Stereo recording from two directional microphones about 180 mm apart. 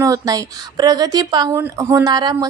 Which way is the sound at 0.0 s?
20° right (ahead or behind).